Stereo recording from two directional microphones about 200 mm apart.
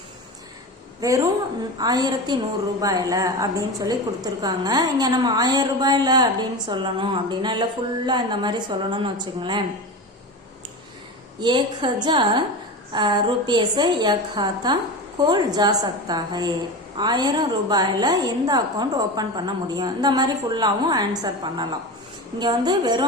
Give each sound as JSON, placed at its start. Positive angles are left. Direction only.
{"t": 1.0, "sound": "a woman's voice", "side_deg": -15}
{"t": 11.3, "sound": "a woman's voice", "side_deg": -25}